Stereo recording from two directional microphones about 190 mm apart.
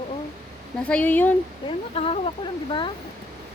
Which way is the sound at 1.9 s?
30° left (ahead or behind).